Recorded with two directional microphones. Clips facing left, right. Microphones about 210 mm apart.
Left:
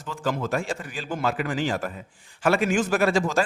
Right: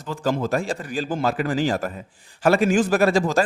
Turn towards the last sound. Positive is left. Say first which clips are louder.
# right 3 dB
turn(degrees=-35)  # may be behind; listen again after turning